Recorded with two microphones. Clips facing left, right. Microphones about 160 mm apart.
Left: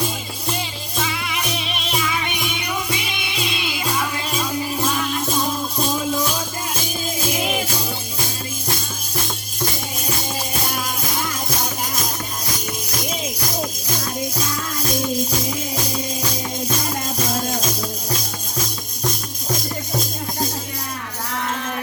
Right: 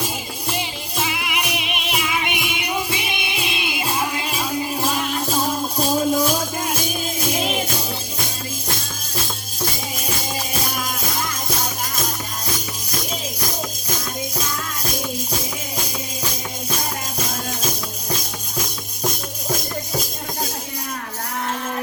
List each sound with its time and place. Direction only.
0.5 s music: 20° right (ahead or behind)